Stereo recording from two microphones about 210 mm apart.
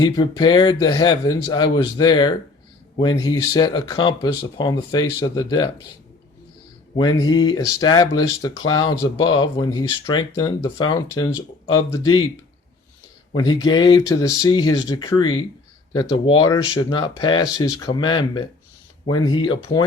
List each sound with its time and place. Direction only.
0.0 s speech: 20° left (ahead or behind)
6.9 s speech: 20° left (ahead or behind)
13.3 s speech: 20° left (ahead or behind)